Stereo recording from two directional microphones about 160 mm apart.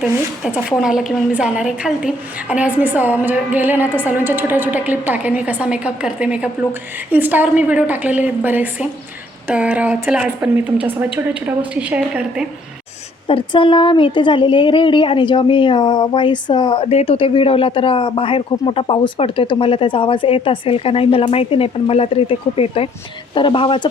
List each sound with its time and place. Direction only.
0.0 s a woman's voice: 5° right (ahead or behind)
13.2 s speech: 35° left (ahead or behind)